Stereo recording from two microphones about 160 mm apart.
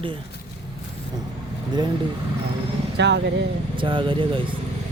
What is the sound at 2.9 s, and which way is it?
Speech, 90° right.